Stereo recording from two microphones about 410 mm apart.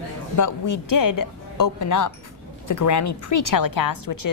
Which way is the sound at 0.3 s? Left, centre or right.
Left.